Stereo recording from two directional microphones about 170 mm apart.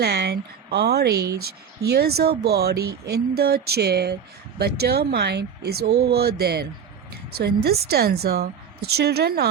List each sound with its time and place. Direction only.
0.0 s speech: 75° right (ahead or behind)